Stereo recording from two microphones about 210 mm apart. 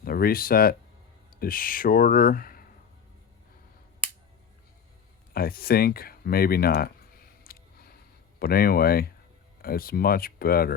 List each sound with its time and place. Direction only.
0.0 s speech: 45° left (ahead or behind)
5.3 s a sound: 45° left (ahead or behind)
8.4 s speech: 45° left (ahead or behind)